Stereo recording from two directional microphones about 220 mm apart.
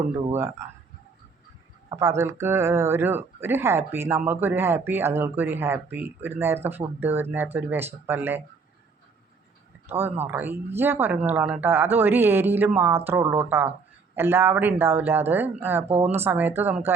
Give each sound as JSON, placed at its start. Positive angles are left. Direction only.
{"t": 1.9, "sound": "speech", "side_deg": -15}
{"t": 9.9, "sound": "speech", "side_deg": -10}
{"t": 15.9, "sound": "speech", "side_deg": -30}
{"t": 16.2, "sound": "speech", "side_deg": -10}